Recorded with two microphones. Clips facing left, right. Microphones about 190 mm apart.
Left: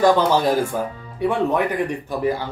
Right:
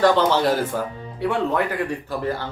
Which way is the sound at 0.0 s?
15° left (ahead or behind).